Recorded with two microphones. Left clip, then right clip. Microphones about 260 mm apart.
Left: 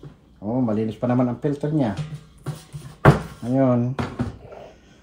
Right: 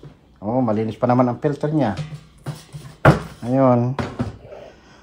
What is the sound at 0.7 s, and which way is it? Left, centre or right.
Speech, centre.